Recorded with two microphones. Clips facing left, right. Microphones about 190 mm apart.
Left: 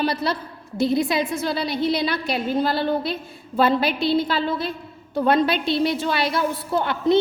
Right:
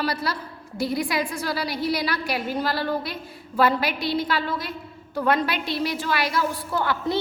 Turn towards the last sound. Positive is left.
turn(degrees=25)  # may be behind; listen again after turning